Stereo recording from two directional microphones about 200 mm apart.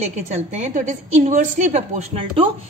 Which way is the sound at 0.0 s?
35° right (ahead or behind).